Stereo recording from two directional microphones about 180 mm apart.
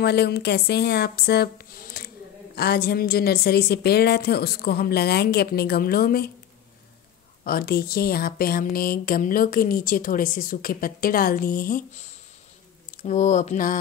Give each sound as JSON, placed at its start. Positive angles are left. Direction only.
{"t": 0.0, "sound": "a woman's voice", "side_deg": 65}
{"t": 7.4, "sound": "speech", "side_deg": 55}